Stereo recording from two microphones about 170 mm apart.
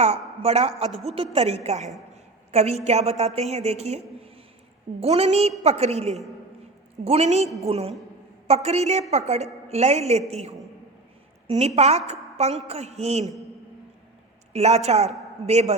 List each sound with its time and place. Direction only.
0.0 s a man's voice: 40° right (ahead or behind)
14.5 s a woman's voice: 40° right (ahead or behind)